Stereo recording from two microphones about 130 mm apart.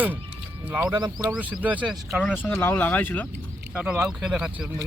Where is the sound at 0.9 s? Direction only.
30° right (ahead or behind).